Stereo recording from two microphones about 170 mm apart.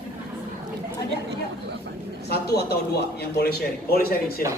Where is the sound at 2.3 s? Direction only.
70° left (ahead or behind).